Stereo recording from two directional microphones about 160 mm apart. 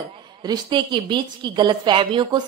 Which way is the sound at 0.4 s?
25° right (ahead or behind).